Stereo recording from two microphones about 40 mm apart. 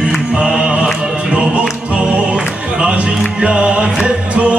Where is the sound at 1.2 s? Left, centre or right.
Right.